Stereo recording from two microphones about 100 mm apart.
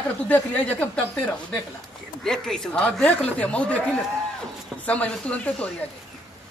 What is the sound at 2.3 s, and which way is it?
Speech, 5° left (ahead or behind).